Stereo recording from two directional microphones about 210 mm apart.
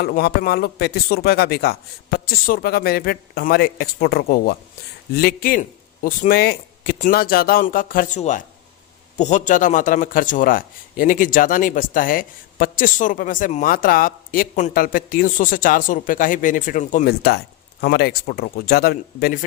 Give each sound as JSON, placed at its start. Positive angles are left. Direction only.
{"t": 0.0, "sound": "a man's voice", "side_deg": 50}
{"t": 17.2, "sound": "speech", "side_deg": 50}